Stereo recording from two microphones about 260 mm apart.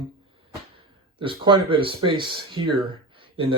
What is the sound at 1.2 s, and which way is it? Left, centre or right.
Speech, centre.